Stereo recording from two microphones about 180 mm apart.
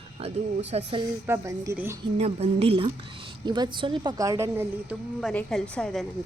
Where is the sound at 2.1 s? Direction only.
35° right (ahead or behind); by 5.3 s 10° right (ahead or behind).